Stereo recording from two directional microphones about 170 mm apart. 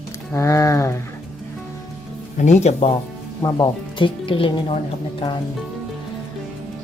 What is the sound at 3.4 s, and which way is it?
Speech, 25° left (ahead or behind).